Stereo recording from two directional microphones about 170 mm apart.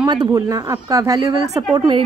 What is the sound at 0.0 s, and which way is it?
Speech, 25° right (ahead or behind).